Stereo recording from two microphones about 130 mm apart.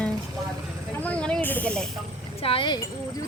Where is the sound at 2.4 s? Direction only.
45° left (ahead or behind).